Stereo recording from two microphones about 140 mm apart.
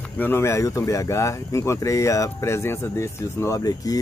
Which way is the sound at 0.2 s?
15° left (ahead or behind).